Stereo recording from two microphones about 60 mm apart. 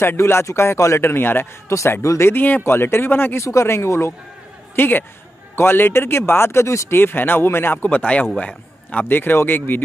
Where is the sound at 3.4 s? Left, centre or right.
Left.